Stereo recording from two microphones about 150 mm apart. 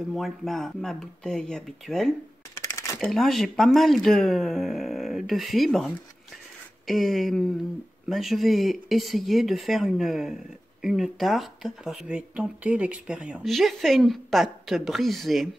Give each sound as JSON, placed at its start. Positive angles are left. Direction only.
{"t": 0.1, "sound": "speech", "side_deg": 0}
{"t": 2.6, "sound": "a sound", "side_deg": 20}
{"t": 3.0, "sound": "speech", "side_deg": 0}